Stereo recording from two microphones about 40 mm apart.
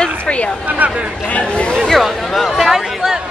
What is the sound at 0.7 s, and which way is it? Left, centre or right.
Speech, right.